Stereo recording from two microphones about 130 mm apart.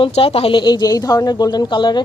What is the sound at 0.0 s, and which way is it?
A woman's voice, 50° left (ahead or behind).